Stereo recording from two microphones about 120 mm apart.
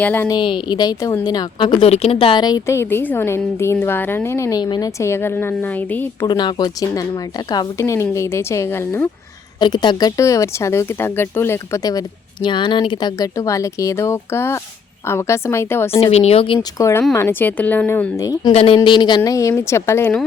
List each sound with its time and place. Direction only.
0.0 s speech: 15° left (ahead or behind)
0.3 s a woman's voice: 40° left (ahead or behind)
1.9 s a woman's voice: 55° left (ahead or behind); by 2.6 s 40° left (ahead or behind)
2.6 s speech: 20° left (ahead or behind)
4.6 s a woman's voice: 40° left (ahead or behind)
4.9 s speech: 20° left (ahead or behind)
6.2 s a woman's voice: 35° left (ahead or behind); by 9.0 s 20° left (ahead or behind)
9.6 s speech: 40° left (ahead or behind); by 11.8 s 20° left (ahead or behind)
11.8 s speech: 30° left (ahead or behind)
15.9 s a woman's voice: 55° left (ahead or behind)
16.6 s speech: 25° left (ahead or behind)
18.5 s a woman's voice: 55° left (ahead or behind)
18.8 s speech: 40° left (ahead or behind); by 20.1 s 20° left (ahead or behind)